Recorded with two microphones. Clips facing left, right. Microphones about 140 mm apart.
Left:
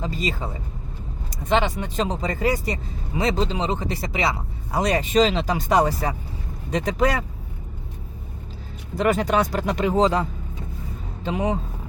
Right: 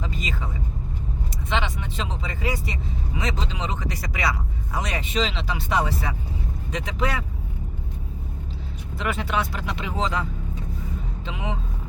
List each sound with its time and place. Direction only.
0.0 s vehicle: 35° left (ahead or behind)
1.5 s speech: 40° left (ahead or behind)
9.0 s speech: 40° left (ahead or behind)
11.3 s speech: 40° left (ahead or behind)